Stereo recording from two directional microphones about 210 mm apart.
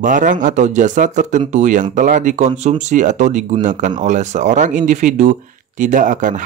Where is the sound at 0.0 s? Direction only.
40° right (ahead or behind).